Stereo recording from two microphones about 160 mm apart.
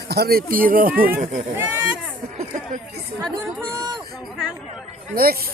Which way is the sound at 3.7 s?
25° right (ahead or behind).